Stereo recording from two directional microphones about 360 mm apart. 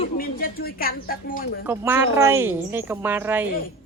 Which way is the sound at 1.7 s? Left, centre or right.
Centre.